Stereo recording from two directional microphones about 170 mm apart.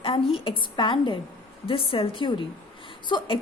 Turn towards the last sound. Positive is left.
turn(degrees=30)  # may be behind; listen again after turning